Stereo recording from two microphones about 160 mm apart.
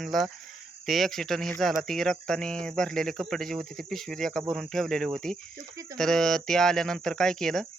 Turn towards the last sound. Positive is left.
turn(degrees=5)  # may be behind; listen again after turning